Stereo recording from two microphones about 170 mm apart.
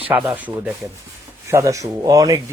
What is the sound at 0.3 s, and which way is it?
Speech, 5° right (ahead or behind).